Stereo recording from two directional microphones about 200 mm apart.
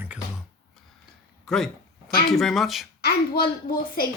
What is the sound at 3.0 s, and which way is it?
A woman's voice, 50° left (ahead or behind).